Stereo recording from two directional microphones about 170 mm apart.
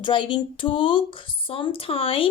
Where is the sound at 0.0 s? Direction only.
30° left (ahead or behind).